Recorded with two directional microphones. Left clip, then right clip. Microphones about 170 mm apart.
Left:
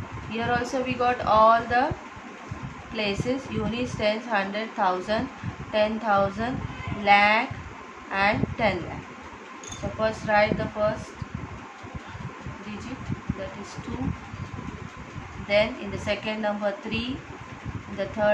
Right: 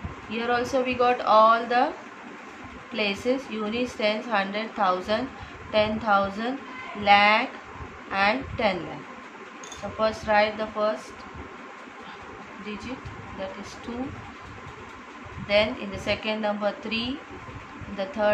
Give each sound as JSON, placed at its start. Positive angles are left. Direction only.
{"t": 0.3, "sound": "a woman's voice", "side_deg": -10}
{"t": 2.9, "sound": "a woman's voice", "side_deg": -10}
{"t": 9.9, "sound": "a woman's voice", "side_deg": -15}
{"t": 16.1, "sound": "a woman's voice", "side_deg": -20}